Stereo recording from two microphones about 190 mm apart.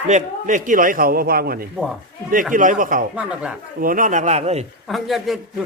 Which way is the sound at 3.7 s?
45° right (ahead or behind).